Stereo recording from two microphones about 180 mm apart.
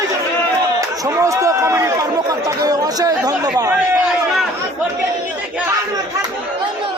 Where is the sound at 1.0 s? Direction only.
20° right (ahead or behind).